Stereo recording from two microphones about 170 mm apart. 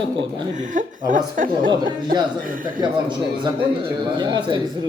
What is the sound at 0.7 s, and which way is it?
Speech, 50° right (ahead or behind).